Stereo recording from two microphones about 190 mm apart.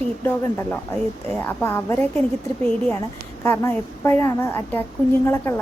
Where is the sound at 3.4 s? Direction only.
10° left (ahead or behind).